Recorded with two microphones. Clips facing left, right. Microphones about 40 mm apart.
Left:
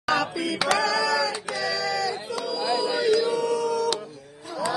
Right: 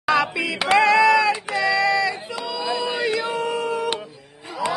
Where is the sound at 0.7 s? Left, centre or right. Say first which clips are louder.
Right 13 dB; right.